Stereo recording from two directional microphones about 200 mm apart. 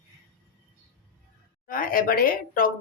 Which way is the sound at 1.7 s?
45° left (ahead or behind).